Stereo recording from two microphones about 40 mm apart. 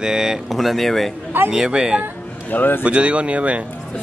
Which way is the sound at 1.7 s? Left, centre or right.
Right.